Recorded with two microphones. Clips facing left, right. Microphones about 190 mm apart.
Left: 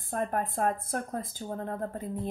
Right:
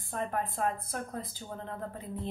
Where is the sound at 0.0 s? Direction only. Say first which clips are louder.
Left 3 dB; 50° left (ahead or behind).